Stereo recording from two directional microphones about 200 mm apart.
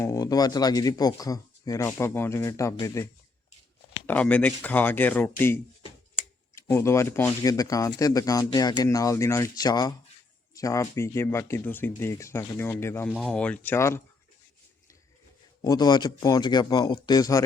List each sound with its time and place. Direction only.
0.0 s speech: 15° left (ahead or behind)
6.5 s speech: 15° left (ahead or behind)
15.6 s speech: 20° left (ahead or behind)